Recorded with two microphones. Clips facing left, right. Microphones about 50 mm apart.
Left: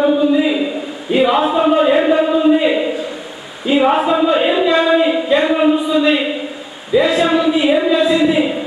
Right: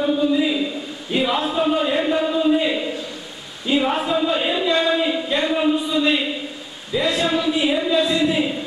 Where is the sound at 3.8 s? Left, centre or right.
Centre.